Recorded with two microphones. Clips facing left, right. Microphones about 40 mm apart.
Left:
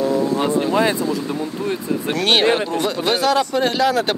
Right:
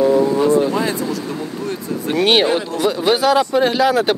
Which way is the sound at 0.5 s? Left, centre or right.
Left.